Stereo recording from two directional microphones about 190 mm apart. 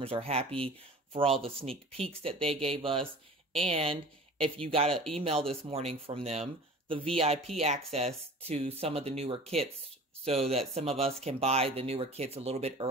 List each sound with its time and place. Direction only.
0.0 s speech: 30° right (ahead or behind)